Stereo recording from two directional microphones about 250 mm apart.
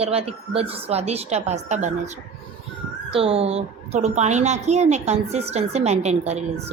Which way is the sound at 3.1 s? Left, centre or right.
Right.